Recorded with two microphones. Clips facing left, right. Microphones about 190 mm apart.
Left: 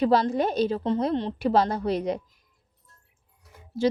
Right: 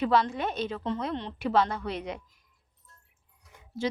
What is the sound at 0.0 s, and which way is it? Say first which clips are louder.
A woman's voice: left 4 dB; 35° left (ahead or behind).